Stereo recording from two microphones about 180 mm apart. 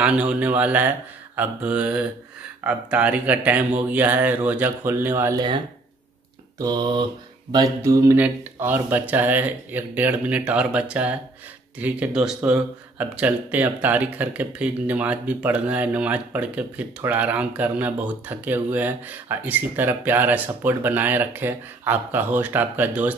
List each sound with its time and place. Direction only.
0.0 s speech: 5° right (ahead or behind)
6.6 s mantra: 25° right (ahead or behind)
7.5 s speech: 20° right (ahead or behind)